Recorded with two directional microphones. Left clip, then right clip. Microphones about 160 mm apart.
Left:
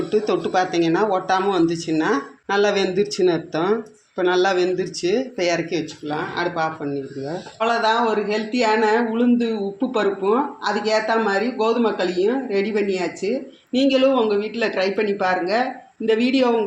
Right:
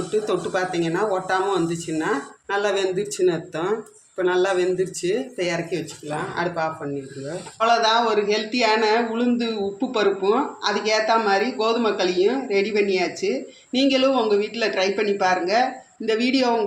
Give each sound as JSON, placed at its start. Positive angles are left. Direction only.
{"t": 0.1, "sound": "speech", "side_deg": 35}